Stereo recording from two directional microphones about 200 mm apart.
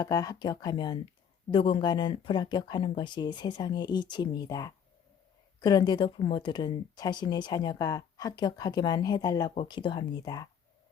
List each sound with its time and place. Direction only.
0.0 s a woman's voice: 20° left (ahead or behind)